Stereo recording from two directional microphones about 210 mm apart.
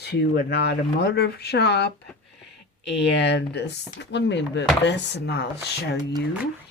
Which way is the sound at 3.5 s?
55° left (ahead or behind).